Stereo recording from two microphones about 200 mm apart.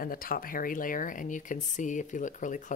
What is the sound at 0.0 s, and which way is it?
Speech, 45° left (ahead or behind).